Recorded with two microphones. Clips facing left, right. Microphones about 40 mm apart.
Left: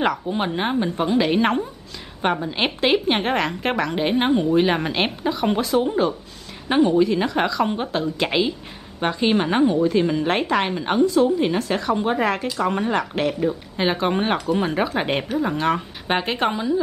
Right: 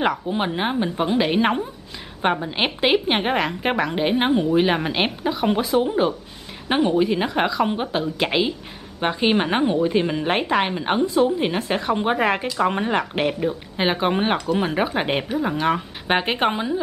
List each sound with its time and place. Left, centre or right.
0.0 s a woman's voice: centre; by 16.8 s right